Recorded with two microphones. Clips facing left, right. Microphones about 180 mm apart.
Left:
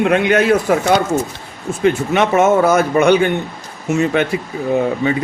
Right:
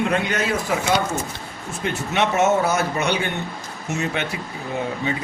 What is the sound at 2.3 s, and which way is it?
Speech, 55° left (ahead or behind).